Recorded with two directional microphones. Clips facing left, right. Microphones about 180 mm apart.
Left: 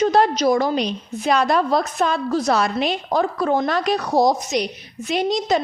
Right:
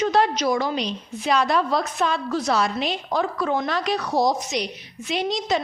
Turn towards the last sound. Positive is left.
turn(degrees=45)  # may be behind; listen again after turning